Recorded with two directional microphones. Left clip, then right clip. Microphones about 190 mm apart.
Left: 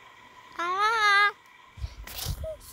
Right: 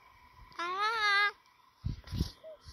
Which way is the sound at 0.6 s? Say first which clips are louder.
Left 7 dB; centre (ahead or behind).